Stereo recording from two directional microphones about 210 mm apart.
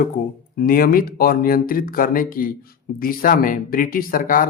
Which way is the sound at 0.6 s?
45° left (ahead or behind).